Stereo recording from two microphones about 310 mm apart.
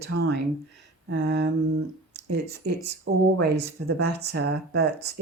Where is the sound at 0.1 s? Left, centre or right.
Right.